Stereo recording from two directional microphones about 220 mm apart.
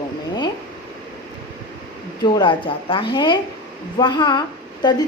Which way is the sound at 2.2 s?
20° left (ahead or behind).